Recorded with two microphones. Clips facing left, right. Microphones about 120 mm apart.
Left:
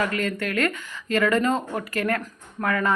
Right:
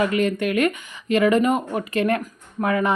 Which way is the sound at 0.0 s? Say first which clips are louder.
Right 5 dB; 20° right (ahead or behind).